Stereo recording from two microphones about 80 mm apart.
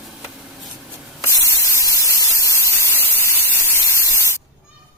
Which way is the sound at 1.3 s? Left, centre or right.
Left.